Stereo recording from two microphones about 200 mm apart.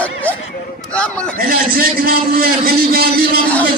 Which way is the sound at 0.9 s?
5° left (ahead or behind).